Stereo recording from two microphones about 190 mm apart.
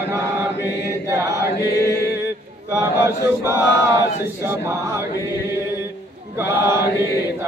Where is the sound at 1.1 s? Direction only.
15° right (ahead or behind).